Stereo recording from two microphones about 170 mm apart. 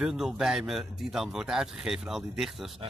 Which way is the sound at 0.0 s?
5° right (ahead or behind).